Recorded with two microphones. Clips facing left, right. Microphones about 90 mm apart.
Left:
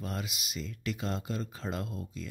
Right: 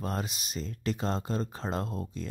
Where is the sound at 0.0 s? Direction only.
40° right (ahead or behind).